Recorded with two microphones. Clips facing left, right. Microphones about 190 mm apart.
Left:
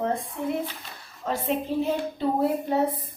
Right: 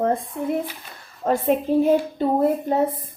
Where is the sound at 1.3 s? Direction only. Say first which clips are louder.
Right 7 dB; 50° right (ahead or behind).